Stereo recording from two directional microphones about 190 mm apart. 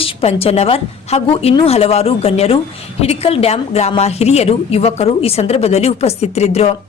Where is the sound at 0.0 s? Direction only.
30° left (ahead or behind).